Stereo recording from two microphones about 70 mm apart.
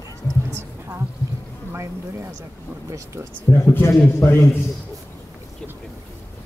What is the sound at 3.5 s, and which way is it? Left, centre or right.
A man's voice, left.